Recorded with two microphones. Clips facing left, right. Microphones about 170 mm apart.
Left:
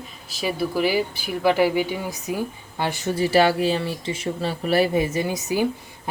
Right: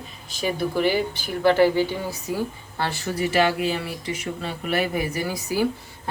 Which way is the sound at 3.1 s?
35° left (ahead or behind).